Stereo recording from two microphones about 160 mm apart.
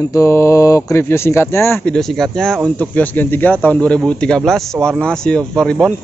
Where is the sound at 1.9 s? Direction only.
Centre (ahead or behind).